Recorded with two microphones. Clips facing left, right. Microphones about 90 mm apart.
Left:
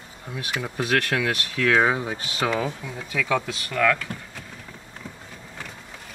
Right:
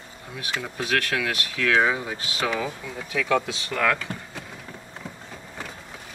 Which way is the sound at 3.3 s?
10° right (ahead or behind).